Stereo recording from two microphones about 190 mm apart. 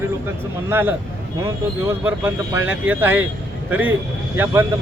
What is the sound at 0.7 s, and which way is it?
Speech, 10° right (ahead or behind).